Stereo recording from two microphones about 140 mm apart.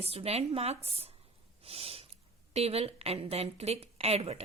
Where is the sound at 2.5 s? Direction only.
45° right (ahead or behind).